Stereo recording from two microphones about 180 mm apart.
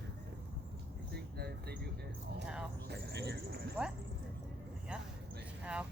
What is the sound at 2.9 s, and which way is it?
Cricket, 70° right (ahead or behind).